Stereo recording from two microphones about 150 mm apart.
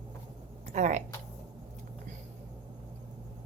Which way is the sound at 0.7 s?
50° right (ahead or behind).